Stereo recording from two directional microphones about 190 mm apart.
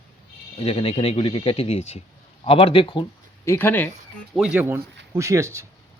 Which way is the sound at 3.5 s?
10° left (ahead or behind).